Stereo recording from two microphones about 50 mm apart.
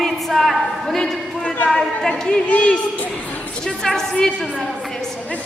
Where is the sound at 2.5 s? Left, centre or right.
Left.